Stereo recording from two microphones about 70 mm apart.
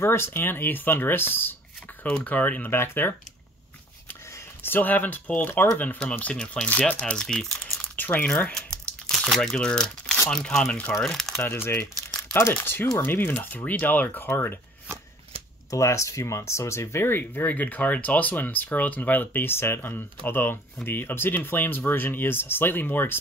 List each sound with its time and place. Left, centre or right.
0.0 s speech: left
2.0 s speech: left
2.7 s speech: left
4.6 s speech: left
6.3 s speech: centre
7.9 s speech: left
8.5 s crumpling: centre
9.3 s speech: centre
11.4 s speech: left
15.7 s speech: left